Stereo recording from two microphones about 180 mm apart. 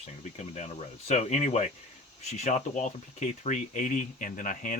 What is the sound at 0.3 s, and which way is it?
Speech, 40° left (ahead or behind).